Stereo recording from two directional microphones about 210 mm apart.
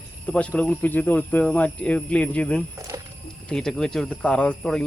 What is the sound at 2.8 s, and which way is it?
Wild animals, 15° right (ahead or behind).